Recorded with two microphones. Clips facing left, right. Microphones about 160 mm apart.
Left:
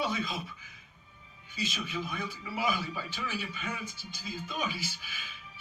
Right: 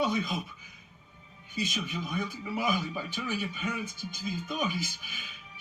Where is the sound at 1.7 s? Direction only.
15° right (ahead or behind).